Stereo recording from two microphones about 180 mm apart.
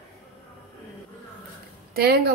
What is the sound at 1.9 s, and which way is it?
Speech, 60° right (ahead or behind).